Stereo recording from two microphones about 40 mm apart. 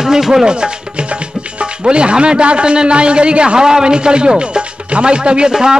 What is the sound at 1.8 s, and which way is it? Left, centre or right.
A man's voice, right.